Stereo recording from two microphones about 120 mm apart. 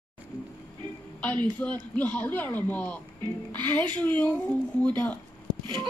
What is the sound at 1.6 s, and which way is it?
Speech, 10° left (ahead or behind).